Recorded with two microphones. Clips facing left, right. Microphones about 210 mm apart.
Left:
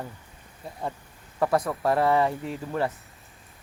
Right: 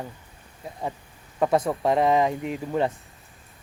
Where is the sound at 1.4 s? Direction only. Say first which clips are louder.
Right 2 dB; 25° right (ahead or behind).